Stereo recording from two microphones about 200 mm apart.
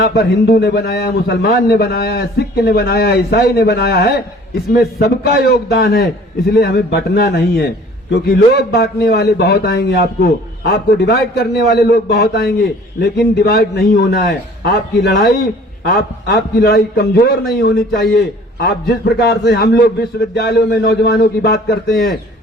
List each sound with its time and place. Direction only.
0.1 s a man's voice: 50° left (ahead or behind)